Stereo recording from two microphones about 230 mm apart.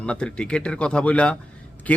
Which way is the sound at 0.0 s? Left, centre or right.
Centre.